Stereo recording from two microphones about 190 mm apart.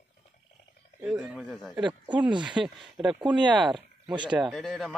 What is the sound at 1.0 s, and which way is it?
Speech, 5° right (ahead or behind).